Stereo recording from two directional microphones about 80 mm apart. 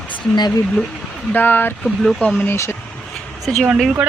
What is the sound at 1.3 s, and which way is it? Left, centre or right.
Speech, left.